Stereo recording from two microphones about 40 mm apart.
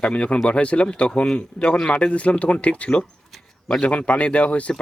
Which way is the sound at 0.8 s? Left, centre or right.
Centre.